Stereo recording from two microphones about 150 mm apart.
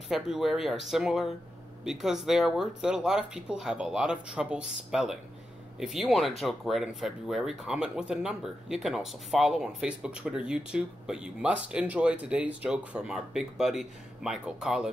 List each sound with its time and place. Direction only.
0.1 s speech: 5° right (ahead or behind)